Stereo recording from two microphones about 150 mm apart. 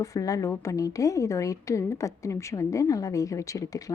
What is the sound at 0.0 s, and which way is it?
A woman's voice, 20° left (ahead or behind).